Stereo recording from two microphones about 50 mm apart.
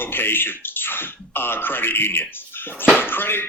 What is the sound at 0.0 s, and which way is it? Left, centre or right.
Speech, left.